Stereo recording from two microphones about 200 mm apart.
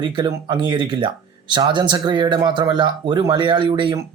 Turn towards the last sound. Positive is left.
turn(degrees=-25)  # may be behind; listen again after turning